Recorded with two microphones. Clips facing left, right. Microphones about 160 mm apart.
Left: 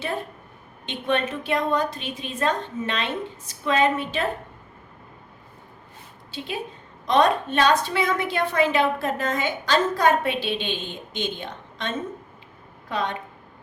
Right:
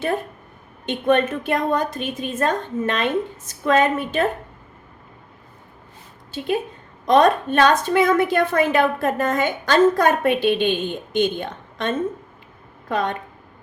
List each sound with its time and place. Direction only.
0.9 s a woman's voice: 50° right (ahead or behind)
7.1 s a woman's voice: 50° right (ahead or behind)